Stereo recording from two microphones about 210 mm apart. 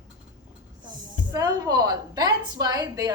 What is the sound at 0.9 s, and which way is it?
A woman's voice, 20° right (ahead or behind).